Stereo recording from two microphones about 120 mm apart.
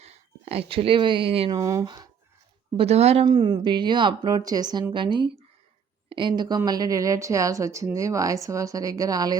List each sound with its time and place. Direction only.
0.0 s speech: 60° right (ahead or behind)
1.5 s speech: 30° right (ahead or behind)
2.7 s speech: 60° right (ahead or behind)
3.2 s speech: 35° right (ahead or behind)